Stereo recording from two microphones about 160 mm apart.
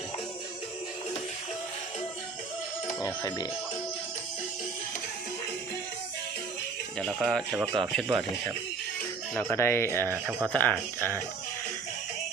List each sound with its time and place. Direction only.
7.0 s speech: 5° left (ahead or behind)
9.3 s speech: 15° left (ahead or behind)